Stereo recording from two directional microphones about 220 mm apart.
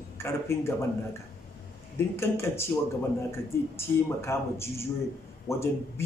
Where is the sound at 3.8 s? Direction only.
10° left (ahead or behind).